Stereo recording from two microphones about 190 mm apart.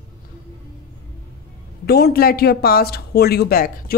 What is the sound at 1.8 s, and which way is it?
Speech, 55° left (ahead or behind).